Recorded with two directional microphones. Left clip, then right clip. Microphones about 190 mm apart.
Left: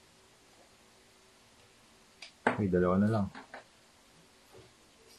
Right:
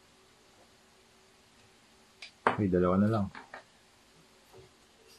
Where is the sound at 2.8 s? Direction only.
15° right (ahead or behind).